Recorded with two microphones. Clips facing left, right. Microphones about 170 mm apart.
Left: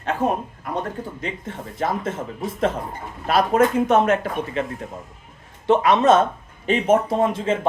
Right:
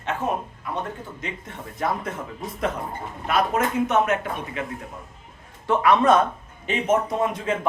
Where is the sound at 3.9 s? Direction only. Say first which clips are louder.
Left 4 dB; 30° left (ahead or behind).